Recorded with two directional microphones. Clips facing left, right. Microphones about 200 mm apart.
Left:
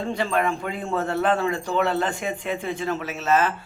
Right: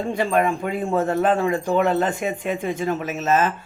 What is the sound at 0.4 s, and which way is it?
Speech, 15° right (ahead or behind).